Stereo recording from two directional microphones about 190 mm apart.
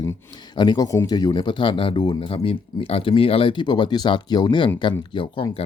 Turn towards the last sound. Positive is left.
turn(degrees=25)  # may be behind; listen again after turning